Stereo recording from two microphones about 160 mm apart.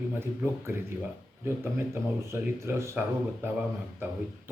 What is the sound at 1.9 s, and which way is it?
Speech, 15° right (ahead or behind).